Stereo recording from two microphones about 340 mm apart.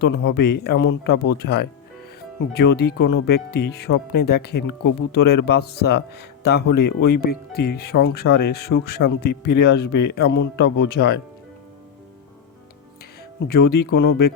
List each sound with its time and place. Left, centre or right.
0.0 s speech: left
9.2 s a man's voice: left
9.5 s speech: left
9.8 s a man's voice: left
10.2 s speech: left
13.6 s speech: left